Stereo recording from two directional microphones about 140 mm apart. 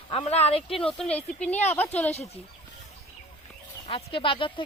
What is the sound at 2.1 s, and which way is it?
Speech, 50° left (ahead or behind).